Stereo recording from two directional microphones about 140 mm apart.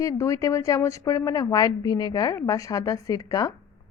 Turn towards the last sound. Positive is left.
turn(degrees=25)  # may be behind; listen again after turning